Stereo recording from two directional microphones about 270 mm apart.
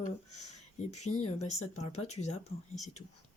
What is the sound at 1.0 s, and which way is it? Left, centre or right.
Speech, left.